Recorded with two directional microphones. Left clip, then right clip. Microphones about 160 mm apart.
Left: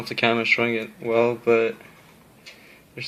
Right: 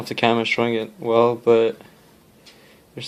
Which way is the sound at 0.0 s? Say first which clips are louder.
Right 2 dB; 40° right (ahead or behind).